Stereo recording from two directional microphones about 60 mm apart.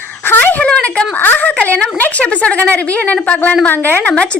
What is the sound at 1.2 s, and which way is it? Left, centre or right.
A woman's voice, left.